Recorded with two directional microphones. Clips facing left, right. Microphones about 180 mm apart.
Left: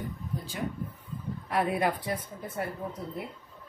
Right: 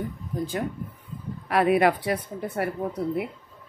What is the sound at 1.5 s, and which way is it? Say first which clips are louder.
Speech: right 7 dB; 85° right.